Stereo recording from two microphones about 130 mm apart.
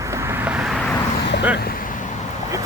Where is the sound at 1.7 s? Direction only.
90° left.